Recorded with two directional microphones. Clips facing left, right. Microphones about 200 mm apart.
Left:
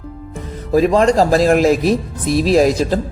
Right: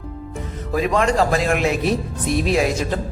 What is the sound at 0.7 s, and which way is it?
Speech, 35° left (ahead or behind).